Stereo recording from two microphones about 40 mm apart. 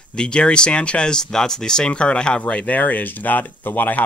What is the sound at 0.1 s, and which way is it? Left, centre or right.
Speech, left.